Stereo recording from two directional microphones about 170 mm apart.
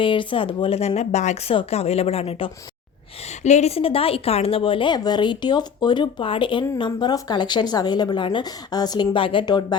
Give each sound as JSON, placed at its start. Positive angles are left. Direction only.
{"t": 0.0, "sound": "a woman's voice", "side_deg": 30}